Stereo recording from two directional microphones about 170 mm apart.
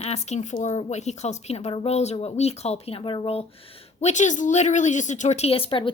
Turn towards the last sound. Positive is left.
turn(degrees=30)  # may be behind; listen again after turning